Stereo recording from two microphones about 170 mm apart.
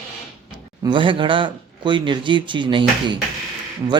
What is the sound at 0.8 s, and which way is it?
Speech, 30° right (ahead or behind).